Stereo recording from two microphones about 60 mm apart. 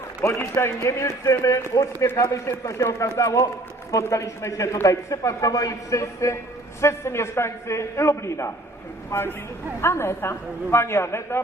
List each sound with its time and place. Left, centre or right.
0.3 s a man's voice: left
3.2 s a man's voice: left
6.8 s a man's voice: left
9.0 s a man's voice: left